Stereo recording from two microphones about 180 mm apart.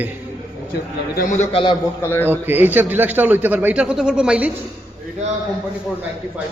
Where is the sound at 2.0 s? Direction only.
10° left (ahead or behind).